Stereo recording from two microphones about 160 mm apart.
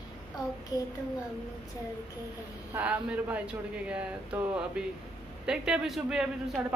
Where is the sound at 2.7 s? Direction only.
10° right (ahead or behind).